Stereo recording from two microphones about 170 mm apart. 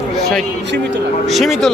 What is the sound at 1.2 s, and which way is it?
Speech, centre (ahead or behind).